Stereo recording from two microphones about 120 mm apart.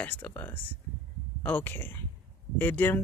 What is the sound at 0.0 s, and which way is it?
Speech, 15° left (ahead or behind).